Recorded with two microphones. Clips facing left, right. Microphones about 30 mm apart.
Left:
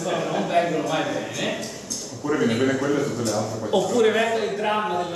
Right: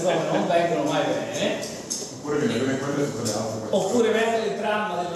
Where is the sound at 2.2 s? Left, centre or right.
Left.